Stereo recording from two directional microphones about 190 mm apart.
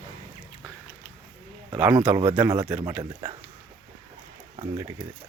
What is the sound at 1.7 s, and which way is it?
Speech, 5° right (ahead or behind).